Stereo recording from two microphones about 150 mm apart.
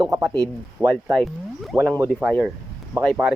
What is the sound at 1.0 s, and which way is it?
Speech, centre (ahead or behind).